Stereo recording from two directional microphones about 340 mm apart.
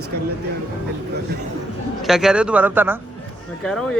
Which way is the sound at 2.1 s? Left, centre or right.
Centre.